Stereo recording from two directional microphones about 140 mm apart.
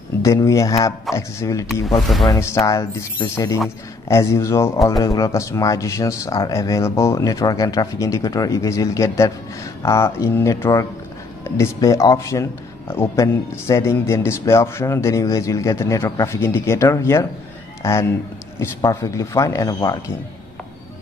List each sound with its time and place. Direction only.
0.2 s a man's voice: 20° left (ahead or behind)